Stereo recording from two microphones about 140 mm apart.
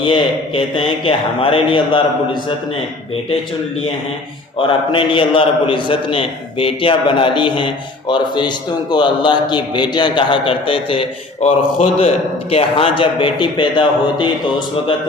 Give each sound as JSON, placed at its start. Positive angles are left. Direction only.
{"t": 0.0, "sound": "a man's voice", "side_deg": 35}
{"t": 4.5, "sound": "a man's voice", "side_deg": 35}